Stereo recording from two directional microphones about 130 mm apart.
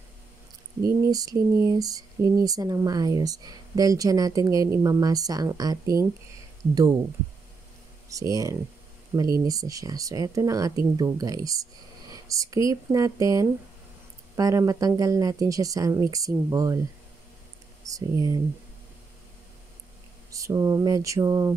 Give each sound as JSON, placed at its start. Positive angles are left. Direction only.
{"t": 0.8, "sound": "speech", "side_deg": -30}
{"t": 8.1, "sound": "speech", "side_deg": -25}
{"t": 17.8, "sound": "speech", "side_deg": -25}
{"t": 20.2, "sound": "speech", "side_deg": -25}